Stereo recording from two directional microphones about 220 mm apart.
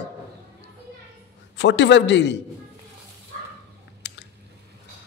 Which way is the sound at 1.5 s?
55° left (ahead or behind).